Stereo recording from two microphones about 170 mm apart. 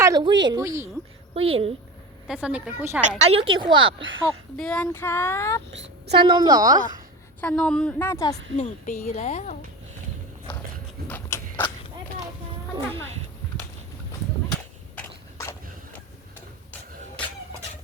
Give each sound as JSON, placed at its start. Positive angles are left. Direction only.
{"t": 0.0, "sound": "speech", "side_deg": -25}
{"t": 1.3, "sound": "a woman's voice", "side_deg": -35}
{"t": 2.2, "sound": "speech", "side_deg": -5}
{"t": 3.0, "sound": "a woman's voice", "side_deg": -30}
{"t": 4.5, "sound": "child singing", "side_deg": 5}
{"t": 4.9, "sound": "a woman's voice", "side_deg": 15}
{"t": 5.7, "sound": "a woman's voice", "side_deg": -90}
{"t": 6.2, "sound": "speech", "side_deg": -25}
{"t": 7.4, "sound": "a woman's voice", "side_deg": 5}
{"t": 8.5, "sound": "speech", "side_deg": 45}
{"t": 11.1, "sound": "a sound", "side_deg": 10}
{"t": 14.9, "sound": "a sound", "side_deg": 10}